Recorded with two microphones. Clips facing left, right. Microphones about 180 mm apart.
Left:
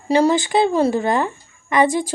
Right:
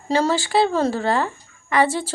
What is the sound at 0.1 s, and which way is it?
Speech, 15° left (ahead or behind).